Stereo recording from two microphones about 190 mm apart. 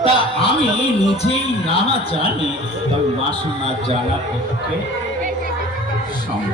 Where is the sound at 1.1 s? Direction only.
35° left (ahead or behind).